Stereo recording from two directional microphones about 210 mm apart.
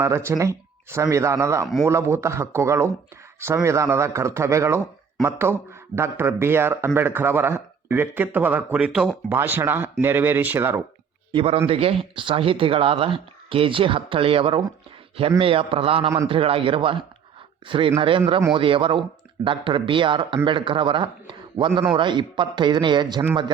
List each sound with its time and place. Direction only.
0.0 s speech: 10° right (ahead or behind)
11.3 s speech: 25° right (ahead or behind)